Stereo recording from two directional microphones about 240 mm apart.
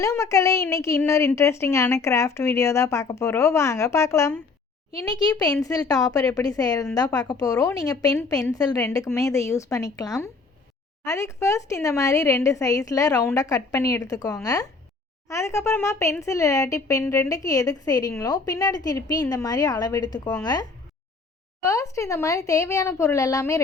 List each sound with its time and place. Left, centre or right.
0.0 s speech: centre